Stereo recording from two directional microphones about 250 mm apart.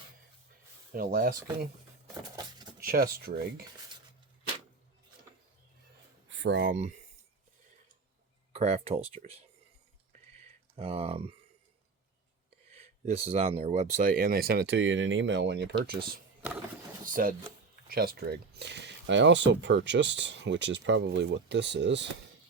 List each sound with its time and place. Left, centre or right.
0.9 s speech: right
2.3 s a sound: centre
2.8 s speech: right
6.3 s speech: right
8.5 s speech: right
10.8 s speech: right
12.7 s speech: right
17.1 s speech: right